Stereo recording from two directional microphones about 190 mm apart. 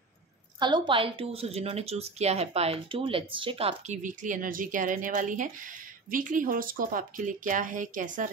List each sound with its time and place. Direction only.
0.6 s speech: 25° right (ahead or behind); by 8.3 s 45° right (ahead or behind)